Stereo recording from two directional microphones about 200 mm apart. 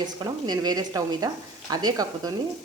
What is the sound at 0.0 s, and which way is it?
Frying, 20° right (ahead or behind).